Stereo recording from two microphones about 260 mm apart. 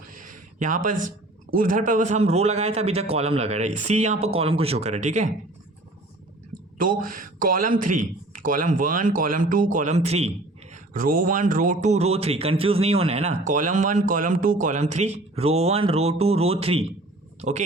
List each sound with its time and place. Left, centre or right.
0.1 s a sound: right
1.5 s a man's voice: right
6.7 s a man's voice: right